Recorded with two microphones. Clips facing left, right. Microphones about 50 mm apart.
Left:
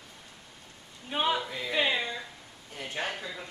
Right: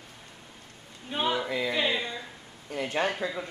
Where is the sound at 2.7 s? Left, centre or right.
Right.